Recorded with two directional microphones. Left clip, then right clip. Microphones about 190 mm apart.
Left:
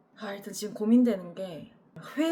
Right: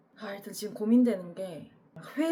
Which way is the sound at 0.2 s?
5° left (ahead or behind).